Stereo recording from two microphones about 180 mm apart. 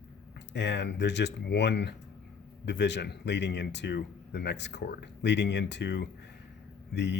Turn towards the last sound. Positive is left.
turn(degrees=75)  # may be behind; listen again after turning